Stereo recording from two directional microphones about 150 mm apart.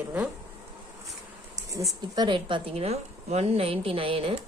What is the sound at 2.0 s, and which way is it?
A woman's voice, 30° right (ahead or behind).